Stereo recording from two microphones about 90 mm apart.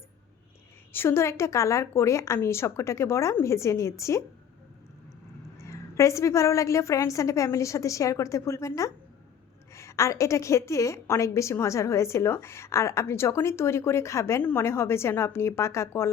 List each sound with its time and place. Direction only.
0.9 s a woman's voice: 25° left (ahead or behind)
5.5 s a woman's voice: 35° left (ahead or behind)